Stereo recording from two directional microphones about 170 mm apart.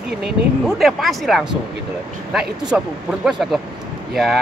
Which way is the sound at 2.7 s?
10° right (ahead or behind).